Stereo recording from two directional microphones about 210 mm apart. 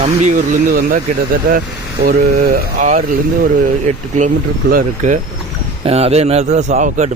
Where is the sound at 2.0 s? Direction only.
45° right (ahead or behind).